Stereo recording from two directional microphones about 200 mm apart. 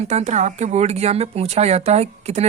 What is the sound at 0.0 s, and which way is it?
Speech, 35° right (ahead or behind).